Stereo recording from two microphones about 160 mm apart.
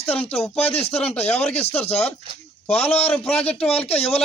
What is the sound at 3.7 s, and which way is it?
Speech, 40° left (ahead or behind).